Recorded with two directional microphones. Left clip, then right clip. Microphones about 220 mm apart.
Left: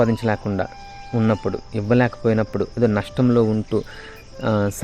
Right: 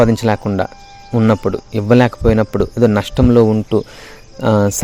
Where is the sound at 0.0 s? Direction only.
30° right (ahead or behind).